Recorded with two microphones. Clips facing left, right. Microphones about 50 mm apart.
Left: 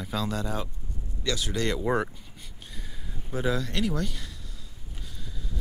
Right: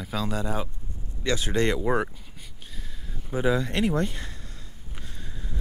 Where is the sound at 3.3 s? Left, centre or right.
Centre; by 4.3 s right.